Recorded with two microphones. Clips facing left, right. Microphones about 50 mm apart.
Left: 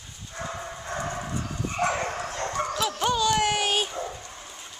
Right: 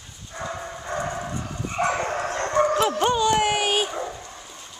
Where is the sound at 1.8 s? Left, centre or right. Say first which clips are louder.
Right 3 dB; right; by 3.9 s centre.